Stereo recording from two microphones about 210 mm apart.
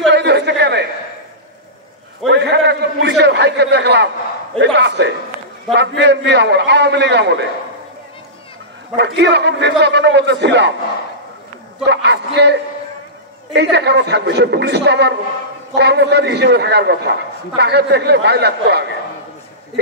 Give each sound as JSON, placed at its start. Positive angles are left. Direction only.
{"t": 0.1, "sound": "a sound", "side_deg": -55}
{"t": 2.3, "sound": "a man's voice", "side_deg": -55}
{"t": 8.9, "sound": "a man's voice", "side_deg": -55}
{"t": 11.8, "sound": "a man's voice", "side_deg": -55}